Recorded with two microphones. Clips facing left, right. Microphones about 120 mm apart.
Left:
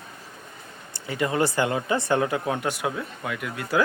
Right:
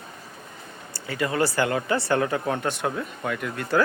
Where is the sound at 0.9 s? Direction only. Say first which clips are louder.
Left 1 dB; 20° left (ahead or behind).